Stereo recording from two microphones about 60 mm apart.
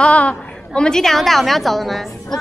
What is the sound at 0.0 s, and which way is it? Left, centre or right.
A woman's voice, left.